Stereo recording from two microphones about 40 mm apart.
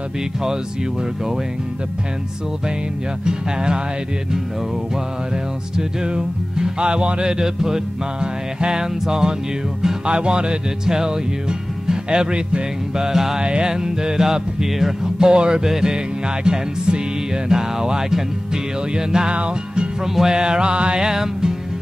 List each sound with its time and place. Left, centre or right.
3.3 s music: right
5.8 s music: centre
13.4 s music: right